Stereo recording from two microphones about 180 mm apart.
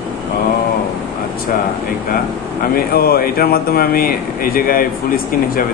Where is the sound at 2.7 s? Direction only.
55° left (ahead or behind).